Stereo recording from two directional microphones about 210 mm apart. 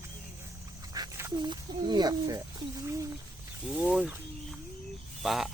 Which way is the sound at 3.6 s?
5° right (ahead or behind).